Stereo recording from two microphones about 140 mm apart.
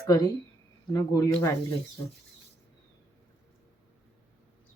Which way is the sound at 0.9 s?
30° left (ahead or behind).